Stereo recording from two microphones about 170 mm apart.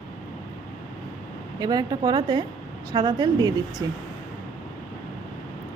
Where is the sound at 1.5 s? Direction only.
20° right (ahead or behind).